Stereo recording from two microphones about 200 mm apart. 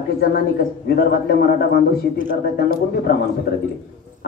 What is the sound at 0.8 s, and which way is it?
Speech, 50° left (ahead or behind).